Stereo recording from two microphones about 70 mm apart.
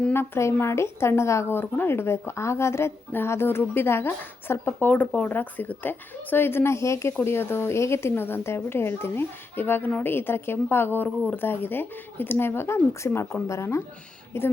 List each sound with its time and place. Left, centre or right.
0.1 s a woman's voice: left
4.9 s a woman's voice: centre; by 14.5 s left